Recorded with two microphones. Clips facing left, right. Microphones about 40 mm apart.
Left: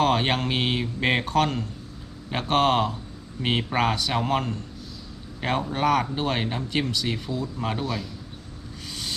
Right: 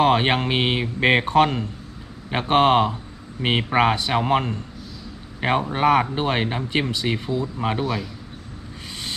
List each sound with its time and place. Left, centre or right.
0.0 s speech: right